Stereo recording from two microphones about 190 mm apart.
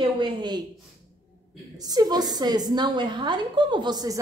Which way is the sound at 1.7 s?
20° right (ahead or behind).